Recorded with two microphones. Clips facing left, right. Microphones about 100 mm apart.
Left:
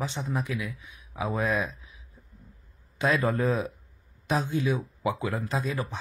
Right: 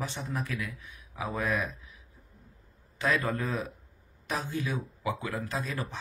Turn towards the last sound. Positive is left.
turn(degrees=20)  # may be behind; listen again after turning